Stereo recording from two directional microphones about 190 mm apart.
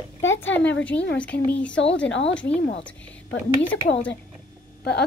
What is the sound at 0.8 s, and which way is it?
Speech, 5° left (ahead or behind).